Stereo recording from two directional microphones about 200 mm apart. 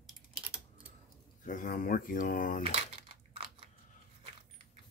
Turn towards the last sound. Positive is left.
turn(degrees=-30)  # may be behind; listen again after turning